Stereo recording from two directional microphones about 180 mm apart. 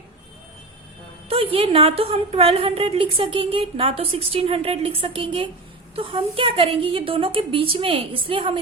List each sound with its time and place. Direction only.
1.3 s a woman's voice: 30° right (ahead or behind)